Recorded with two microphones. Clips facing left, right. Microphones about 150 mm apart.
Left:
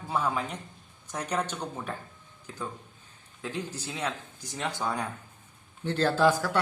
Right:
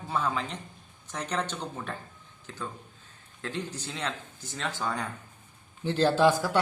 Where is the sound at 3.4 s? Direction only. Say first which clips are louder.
Even; 10° left (ahead or behind).